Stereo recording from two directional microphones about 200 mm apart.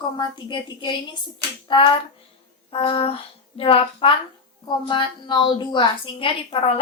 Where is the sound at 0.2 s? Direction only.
20° left (ahead or behind).